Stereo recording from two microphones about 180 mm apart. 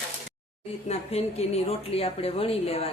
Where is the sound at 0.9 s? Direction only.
35° left (ahead or behind).